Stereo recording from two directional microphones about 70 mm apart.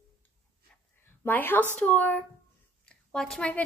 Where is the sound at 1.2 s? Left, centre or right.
Left.